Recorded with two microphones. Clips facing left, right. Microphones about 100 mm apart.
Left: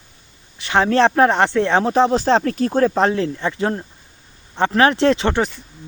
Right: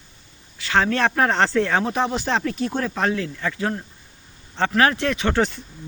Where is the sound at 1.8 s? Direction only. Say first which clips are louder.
Left 7 dB; 35° left (ahead or behind).